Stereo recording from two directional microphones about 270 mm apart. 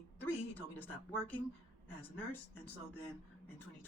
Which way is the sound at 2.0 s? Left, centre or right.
Centre.